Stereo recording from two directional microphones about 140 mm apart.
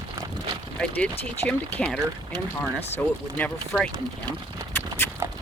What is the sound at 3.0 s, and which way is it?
Speech, 10° left (ahead or behind).